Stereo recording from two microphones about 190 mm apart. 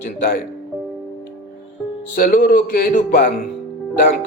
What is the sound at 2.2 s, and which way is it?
Music, 50° left (ahead or behind).